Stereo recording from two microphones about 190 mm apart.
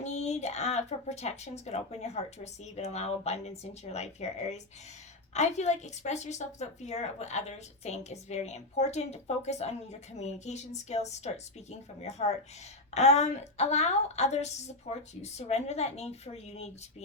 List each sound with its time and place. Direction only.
0.0 s a woman's voice: 35° left (ahead or behind)